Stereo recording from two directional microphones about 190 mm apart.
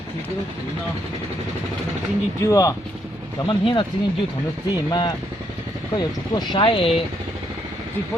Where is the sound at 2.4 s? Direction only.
15° left (ahead or behind).